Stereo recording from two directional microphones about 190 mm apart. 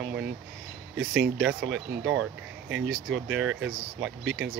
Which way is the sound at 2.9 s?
80° right.